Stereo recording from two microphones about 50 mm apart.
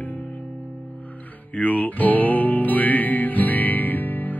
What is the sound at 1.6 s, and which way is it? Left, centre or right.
Music, left.